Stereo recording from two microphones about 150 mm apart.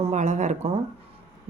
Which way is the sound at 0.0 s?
50° right (ahead or behind).